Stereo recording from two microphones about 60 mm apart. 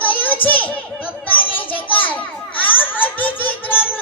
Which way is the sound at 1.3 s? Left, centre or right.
Left.